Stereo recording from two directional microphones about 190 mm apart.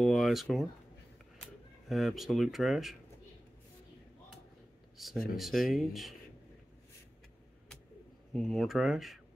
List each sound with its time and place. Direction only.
0.0 s speech: centre (ahead or behind)
4.9 s speech: centre (ahead or behind)
8.3 s speech: centre (ahead or behind)